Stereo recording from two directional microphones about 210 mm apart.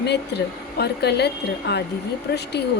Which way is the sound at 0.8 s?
50° left (ahead or behind).